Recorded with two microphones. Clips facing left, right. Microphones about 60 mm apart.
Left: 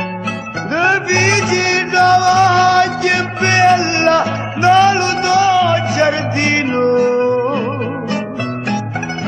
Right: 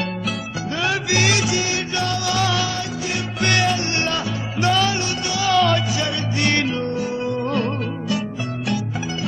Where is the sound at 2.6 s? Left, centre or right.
Left.